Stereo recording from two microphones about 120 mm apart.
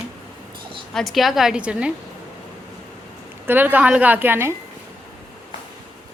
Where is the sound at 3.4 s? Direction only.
15° right (ahead or behind).